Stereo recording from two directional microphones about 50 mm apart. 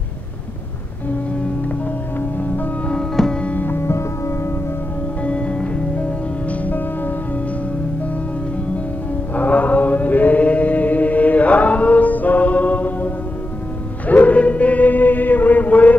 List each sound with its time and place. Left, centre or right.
3.2 s music: centre
3.4 s music: left
3.7 s music: left
5.2 s music: left
9.3 s chant: left